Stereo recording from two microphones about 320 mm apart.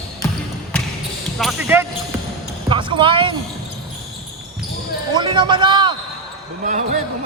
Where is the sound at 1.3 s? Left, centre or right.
Centre.